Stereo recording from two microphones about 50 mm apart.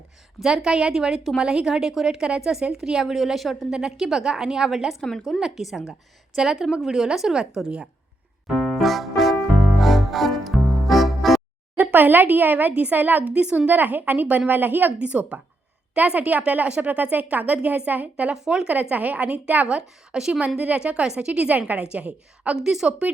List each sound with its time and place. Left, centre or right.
0.3 s a woman's voice: centre
5.0 s speech: centre
5.7 s a woman's voice: centre
8.4 s music: centre
11.8 s a woman's voice: right
13.7 s a woman's voice: right
14.9 s a woman's voice: right
18.4 s a woman's voice: centre
18.7 s a woman's voice: right
20.1 s a woman's voice: centre
20.6 s a woman's voice: right
22.6 s a woman's voice: centre
22.9 s a woman's voice: right